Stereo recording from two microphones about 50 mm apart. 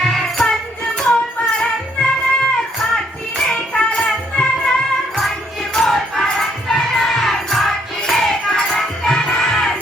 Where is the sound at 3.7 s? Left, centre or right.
Centre.